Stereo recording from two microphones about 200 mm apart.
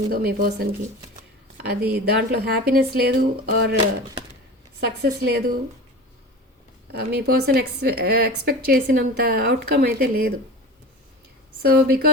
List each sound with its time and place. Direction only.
0.1 s a woman's voice: 50° right (ahead or behind)
4.8 s a woman's voice: 50° right (ahead or behind)
6.9 s a woman's voice: 55° right (ahead or behind)
11.6 s a woman's voice: 50° right (ahead or behind)